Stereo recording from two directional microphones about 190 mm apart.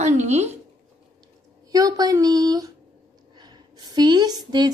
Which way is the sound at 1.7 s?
20° right (ahead or behind).